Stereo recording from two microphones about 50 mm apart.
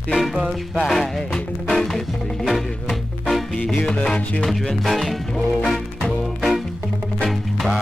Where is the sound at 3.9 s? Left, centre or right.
Left.